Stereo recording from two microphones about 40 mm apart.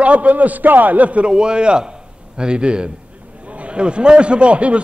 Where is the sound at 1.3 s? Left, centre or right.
Right.